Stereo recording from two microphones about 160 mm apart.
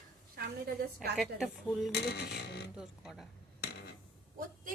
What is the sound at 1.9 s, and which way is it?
Speech, 90° left.